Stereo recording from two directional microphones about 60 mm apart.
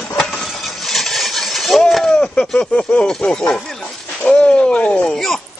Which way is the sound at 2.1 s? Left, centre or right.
Centre.